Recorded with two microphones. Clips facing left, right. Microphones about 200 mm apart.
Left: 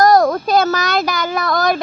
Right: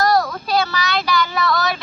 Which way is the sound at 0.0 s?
45° left (ahead or behind).